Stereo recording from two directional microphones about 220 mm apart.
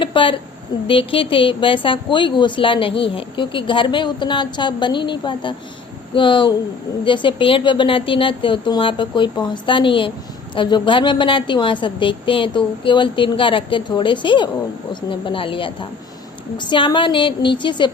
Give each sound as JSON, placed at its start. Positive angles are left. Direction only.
{"t": 0.0, "sound": "a woman's voice", "side_deg": 25}